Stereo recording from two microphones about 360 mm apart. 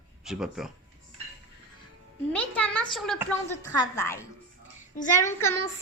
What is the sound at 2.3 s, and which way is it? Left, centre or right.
Speech, centre.